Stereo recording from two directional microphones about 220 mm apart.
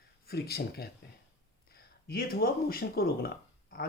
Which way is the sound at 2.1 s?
45° left (ahead or behind).